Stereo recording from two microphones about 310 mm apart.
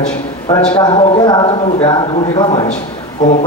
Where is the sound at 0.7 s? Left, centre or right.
Centre.